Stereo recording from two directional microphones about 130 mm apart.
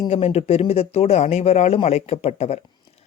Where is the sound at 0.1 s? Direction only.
50° left (ahead or behind).